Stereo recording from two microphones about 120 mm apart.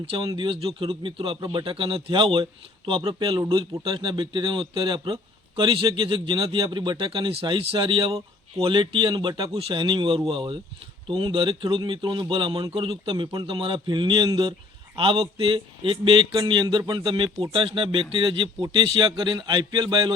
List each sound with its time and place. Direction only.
0.3 s a man's voice: 40° right (ahead or behind)
9.5 s a man's voice: 55° right (ahead or behind); by 14.5 s 40° right (ahead or behind)
14.9 s a man's voice: 50° right (ahead or behind)